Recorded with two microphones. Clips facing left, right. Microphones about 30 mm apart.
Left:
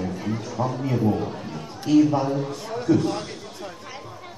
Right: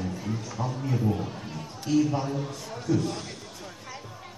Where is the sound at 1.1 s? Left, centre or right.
Left.